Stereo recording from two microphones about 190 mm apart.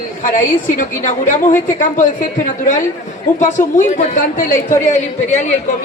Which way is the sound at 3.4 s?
40° left (ahead or behind).